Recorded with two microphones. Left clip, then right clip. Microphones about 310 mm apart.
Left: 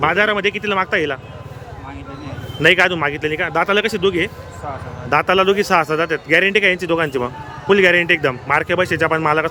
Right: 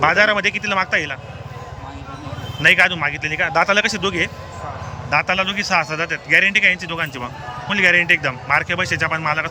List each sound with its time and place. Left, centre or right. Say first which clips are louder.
0.0 s speech: right 1 dB; centre
2.6 s speech: left 1 dB; centre